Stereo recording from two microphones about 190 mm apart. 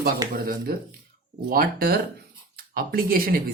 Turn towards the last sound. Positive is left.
turn(degrees=-50)  # may be behind; listen again after turning